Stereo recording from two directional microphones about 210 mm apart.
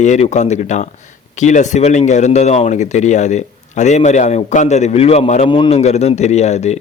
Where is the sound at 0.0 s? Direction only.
35° left (ahead or behind).